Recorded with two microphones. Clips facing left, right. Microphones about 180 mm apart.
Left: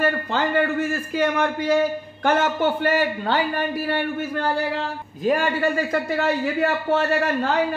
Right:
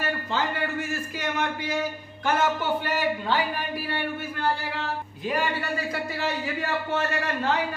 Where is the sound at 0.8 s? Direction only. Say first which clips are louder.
Left 8 dB; 55° left (ahead or behind).